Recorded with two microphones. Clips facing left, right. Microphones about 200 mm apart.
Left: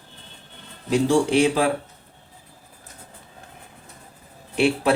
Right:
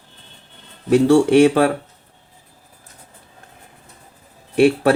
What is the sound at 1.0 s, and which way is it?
Speech, 60° right (ahead or behind).